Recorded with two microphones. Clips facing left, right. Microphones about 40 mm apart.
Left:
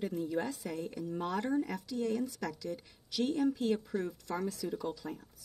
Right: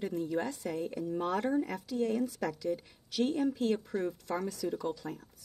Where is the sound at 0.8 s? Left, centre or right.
Centre.